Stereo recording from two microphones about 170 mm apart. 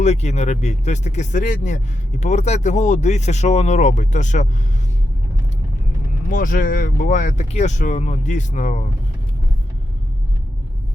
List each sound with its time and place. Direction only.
0.0 s speech: 40° left (ahead or behind)
6.3 s speech: 55° left (ahead or behind)